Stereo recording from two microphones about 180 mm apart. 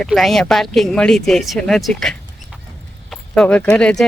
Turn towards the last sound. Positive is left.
turn(degrees=5)  # may be behind; listen again after turning